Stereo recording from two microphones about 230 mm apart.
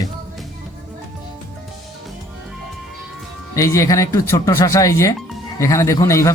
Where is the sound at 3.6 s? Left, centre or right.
Centre.